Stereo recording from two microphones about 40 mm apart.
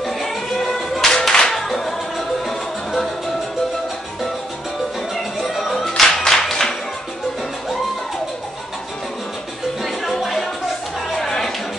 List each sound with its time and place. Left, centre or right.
0.0 s music: centre
5.4 s music: centre
9.8 s music: centre
11.1 s a sound: centre